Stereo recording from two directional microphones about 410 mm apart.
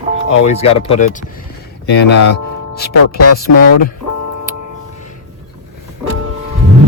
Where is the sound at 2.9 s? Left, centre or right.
Left.